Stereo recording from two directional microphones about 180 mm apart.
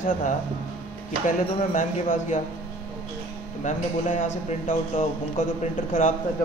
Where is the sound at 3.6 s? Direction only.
45° left (ahead or behind).